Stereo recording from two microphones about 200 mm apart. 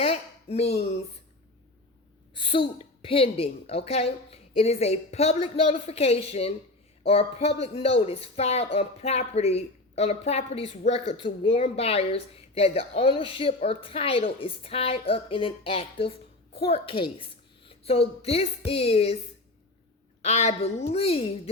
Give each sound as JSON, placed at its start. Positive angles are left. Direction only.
{"t": 0.0, "sound": "speech", "side_deg": 30}
{"t": 2.3, "sound": "a woman's voice", "side_deg": 25}
{"t": 20.2, "sound": "a woman's voice", "side_deg": 35}